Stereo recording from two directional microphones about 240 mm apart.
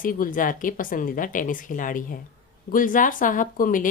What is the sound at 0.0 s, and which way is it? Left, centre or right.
Speech, left.